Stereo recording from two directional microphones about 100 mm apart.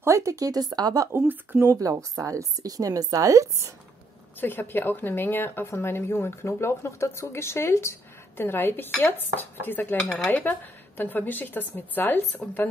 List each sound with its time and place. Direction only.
0.0 s a woman's voice: 30° right (ahead or behind)
1.1 s speech: 20° right (ahead or behind)
1.8 s a woman's voice: 35° right (ahead or behind)
4.4 s a woman's voice: 20° left (ahead or behind)
10.0 s speech: 5° left (ahead or behind)
10.3 s a woman's voice: 15° left (ahead or behind)